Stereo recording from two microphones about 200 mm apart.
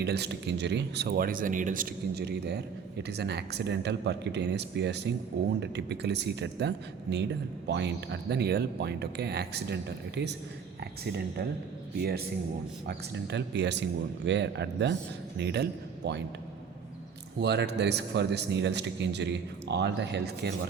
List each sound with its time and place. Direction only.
0.0 s a man's voice: 55° right (ahead or behind)
12.9 s a man's voice: 60° right (ahead or behind)
17.4 s a man's voice: 55° right (ahead or behind)